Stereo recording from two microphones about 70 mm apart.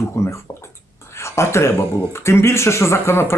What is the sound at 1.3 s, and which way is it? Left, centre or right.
Speech, left.